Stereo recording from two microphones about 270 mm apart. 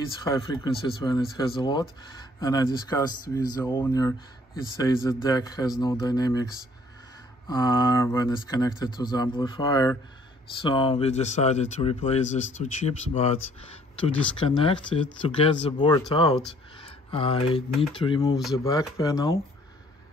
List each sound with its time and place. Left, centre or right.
0.2 s speech: centre
7.4 s speech: centre
14.4 s speech: centre